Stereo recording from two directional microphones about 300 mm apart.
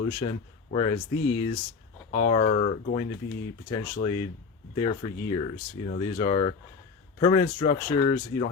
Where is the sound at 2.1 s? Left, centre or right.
Centre.